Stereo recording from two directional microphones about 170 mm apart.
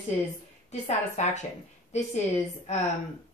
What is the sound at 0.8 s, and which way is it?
Speech, 45° left (ahead or behind).